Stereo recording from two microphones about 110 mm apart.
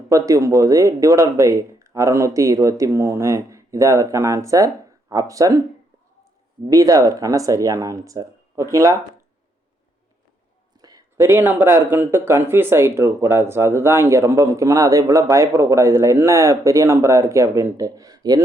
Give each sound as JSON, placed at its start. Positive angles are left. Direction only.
{"t": 0.1, "sound": "speech", "side_deg": -30}
{"t": 6.7, "sound": "speech", "side_deg": -30}
{"t": 10.8, "sound": "a sound", "side_deg": -35}
{"t": 11.3, "sound": "speech", "side_deg": -20}